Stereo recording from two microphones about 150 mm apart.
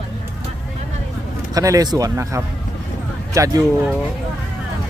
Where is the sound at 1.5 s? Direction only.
25° right (ahead or behind).